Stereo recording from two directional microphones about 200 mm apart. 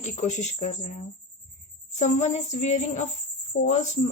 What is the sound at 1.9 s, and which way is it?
Speech, 35° left (ahead or behind).